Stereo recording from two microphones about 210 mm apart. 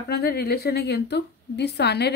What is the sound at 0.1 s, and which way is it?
A woman's voice, 50° left (ahead or behind).